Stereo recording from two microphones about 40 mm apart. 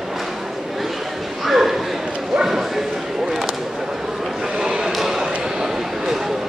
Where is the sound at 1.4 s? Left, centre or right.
Centre.